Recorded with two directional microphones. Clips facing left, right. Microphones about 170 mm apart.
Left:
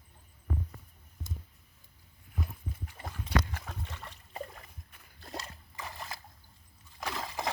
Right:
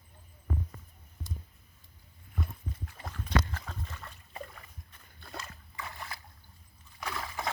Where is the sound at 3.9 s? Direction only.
30° left (ahead or behind).